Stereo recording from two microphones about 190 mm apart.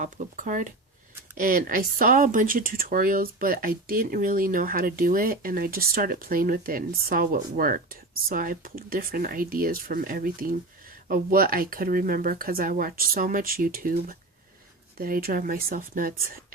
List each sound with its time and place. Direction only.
0.0 s speech: 45° right (ahead or behind)